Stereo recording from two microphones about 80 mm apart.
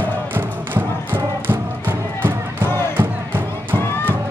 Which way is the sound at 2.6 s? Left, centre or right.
Left.